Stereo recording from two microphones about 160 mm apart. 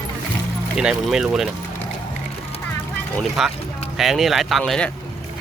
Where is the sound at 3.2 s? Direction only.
Centre (ahead or behind).